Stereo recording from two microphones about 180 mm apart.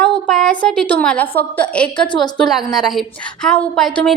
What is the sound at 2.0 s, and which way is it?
Speech, 25° left (ahead or behind).